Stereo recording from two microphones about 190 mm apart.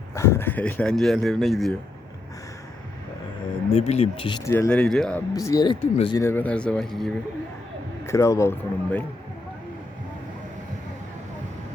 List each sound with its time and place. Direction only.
0.1 s speech: 15° left (ahead or behind)
3.7 s speech: 30° left (ahead or behind)
4.5 s speech: 10° left (ahead or behind)
5.3 s speech: 20° left (ahead or behind)
6.2 s speech: 10° left (ahead or behind)
8.0 s speech: 15° left (ahead or behind)